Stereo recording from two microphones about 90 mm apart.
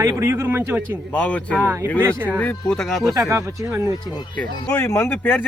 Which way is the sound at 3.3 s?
30° right (ahead or behind).